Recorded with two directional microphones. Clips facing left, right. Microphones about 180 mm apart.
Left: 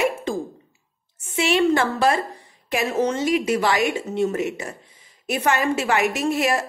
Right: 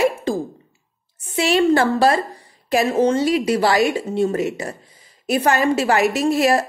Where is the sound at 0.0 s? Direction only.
35° right (ahead or behind).